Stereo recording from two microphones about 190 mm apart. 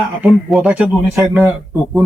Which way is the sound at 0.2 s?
Centre (ahead or behind).